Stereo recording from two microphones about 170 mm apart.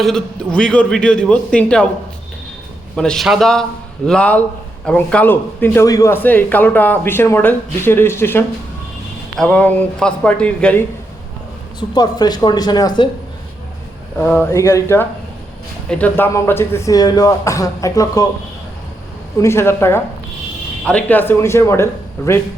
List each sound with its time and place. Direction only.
0.0 s a man's voice: 5° left (ahead or behind)
2.9 s a man's voice: 5° left (ahead or behind)
11.8 s speech: 25° left (ahead or behind)
14.2 s a man's voice: 10° left (ahead or behind)
19.4 s a man's voice: 15° left (ahead or behind)